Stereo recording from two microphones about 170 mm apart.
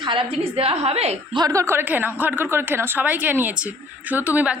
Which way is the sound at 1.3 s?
20° right (ahead or behind).